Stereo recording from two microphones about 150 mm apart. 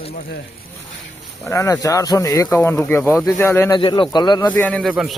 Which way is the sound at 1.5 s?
20° left (ahead or behind).